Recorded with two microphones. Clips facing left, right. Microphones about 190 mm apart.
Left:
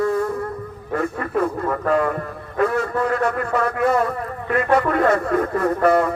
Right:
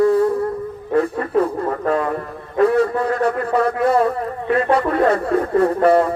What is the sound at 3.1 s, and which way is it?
Speech, 35° right (ahead or behind).